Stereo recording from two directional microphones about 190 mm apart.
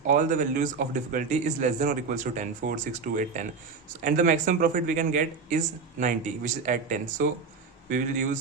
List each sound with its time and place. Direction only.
0.1 s speech: 45° right (ahead or behind)